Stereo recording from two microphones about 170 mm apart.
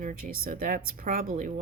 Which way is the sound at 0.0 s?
50° right (ahead or behind).